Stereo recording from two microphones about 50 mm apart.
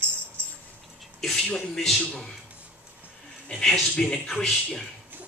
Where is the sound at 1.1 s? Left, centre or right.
Centre.